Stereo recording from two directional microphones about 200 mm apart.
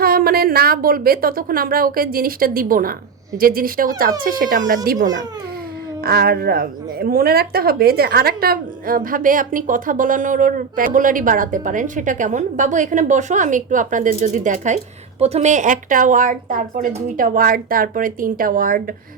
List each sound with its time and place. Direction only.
0.0 s a woman's voice: 50° right (ahead or behind)
6.0 s a woman's voice: 50° right (ahead or behind)